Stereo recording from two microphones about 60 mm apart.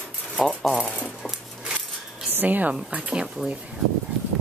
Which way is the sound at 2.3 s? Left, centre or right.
Right.